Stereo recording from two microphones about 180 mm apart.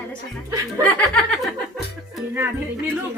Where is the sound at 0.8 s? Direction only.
5° left (ahead or behind).